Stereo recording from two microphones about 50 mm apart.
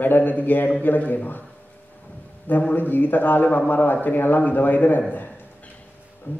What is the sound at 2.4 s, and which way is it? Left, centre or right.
A man's voice, left.